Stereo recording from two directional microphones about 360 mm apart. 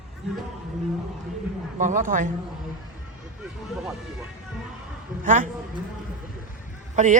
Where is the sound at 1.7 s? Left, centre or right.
Right.